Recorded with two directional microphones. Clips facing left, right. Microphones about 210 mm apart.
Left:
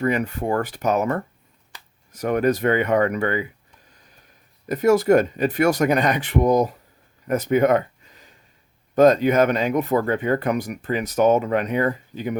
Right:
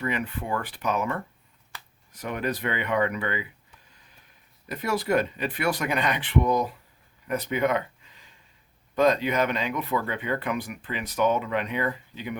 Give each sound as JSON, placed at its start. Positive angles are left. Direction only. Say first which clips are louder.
{"t": 0.0, "sound": "speech", "louder": "left 8 dB", "side_deg": 45}
{"t": 4.7, "sound": "speech", "louder": "left 9 dB", "side_deg": 45}